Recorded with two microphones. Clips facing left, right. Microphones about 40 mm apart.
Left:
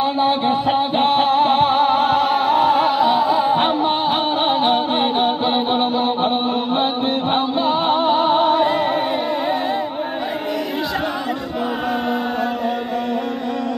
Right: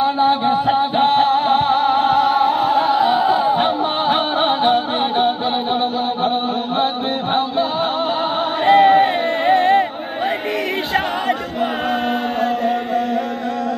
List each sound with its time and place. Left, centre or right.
0.0 s a sound: centre
0.9 s music: centre
3.0 s music: right
4.1 s music: centre
5.1 s music: centre
8.1 s music: centre
8.6 s a sound: right
11.9 s music: right